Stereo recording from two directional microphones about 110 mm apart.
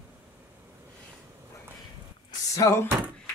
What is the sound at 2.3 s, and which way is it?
Music, 30° left (ahead or behind).